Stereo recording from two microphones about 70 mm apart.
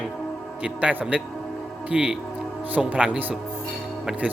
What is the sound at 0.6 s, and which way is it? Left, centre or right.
Speech, centre.